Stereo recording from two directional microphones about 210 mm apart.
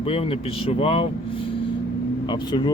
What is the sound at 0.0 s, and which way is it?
Speech, 30° left (ahead or behind).